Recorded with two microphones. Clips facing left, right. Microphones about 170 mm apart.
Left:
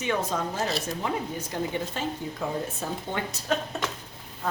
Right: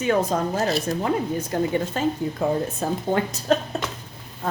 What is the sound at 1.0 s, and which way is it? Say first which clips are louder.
A woman's voice: right 6 dB; 55° right (ahead or behind).